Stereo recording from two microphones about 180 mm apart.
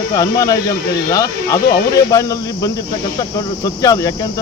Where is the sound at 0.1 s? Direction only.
20° left (ahead or behind).